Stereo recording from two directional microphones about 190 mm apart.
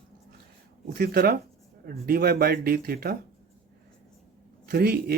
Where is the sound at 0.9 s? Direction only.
50° right (ahead or behind).